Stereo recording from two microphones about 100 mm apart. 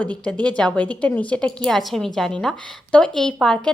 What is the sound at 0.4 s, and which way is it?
A woman's voice, 10° left (ahead or behind).